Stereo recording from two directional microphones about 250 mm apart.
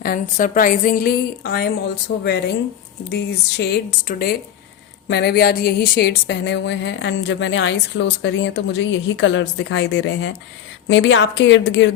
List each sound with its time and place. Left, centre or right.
0.0 s a woman's voice: left
3.1 s a woman's voice: left
5.0 s a sound: left